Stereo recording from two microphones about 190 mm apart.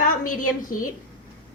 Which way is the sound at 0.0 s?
45° left (ahead or behind).